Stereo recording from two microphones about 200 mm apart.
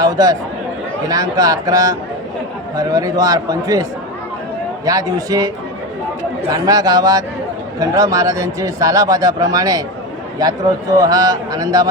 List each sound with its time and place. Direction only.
0.0 s speech: 20° right (ahead or behind)
4.9 s speech: 20° right (ahead or behind)
6.5 s speech: 20° right (ahead or behind)
10.9 s speech: 20° right (ahead or behind)